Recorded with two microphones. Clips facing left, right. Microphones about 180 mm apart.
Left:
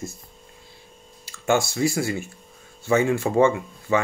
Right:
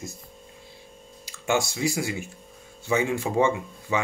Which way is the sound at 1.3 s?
15° right (ahead or behind).